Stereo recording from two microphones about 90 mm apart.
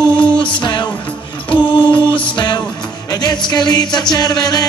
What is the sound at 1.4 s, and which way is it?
Music, 65° left (ahead or behind).